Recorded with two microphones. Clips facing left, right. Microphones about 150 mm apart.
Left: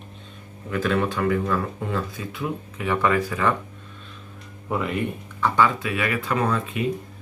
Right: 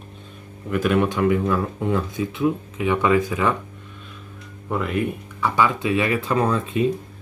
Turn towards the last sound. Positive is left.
turn(degrees=-30)  # may be behind; listen again after turning